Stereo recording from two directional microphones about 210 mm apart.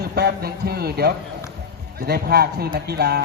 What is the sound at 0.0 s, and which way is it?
A man's voice, 50° right (ahead or behind).